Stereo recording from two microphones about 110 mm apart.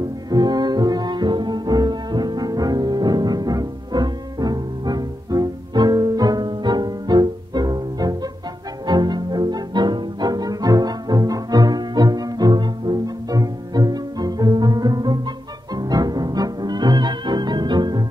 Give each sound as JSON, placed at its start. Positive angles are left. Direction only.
{"t": 0.3, "sound": "music", "side_deg": -40}